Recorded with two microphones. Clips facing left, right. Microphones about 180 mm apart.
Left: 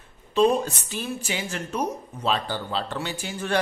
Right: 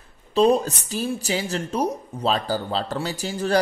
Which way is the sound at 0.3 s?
35° right (ahead or behind).